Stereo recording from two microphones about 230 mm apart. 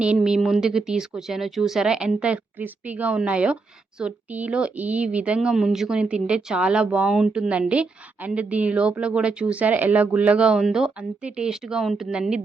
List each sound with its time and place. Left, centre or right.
0.0 s speech: centre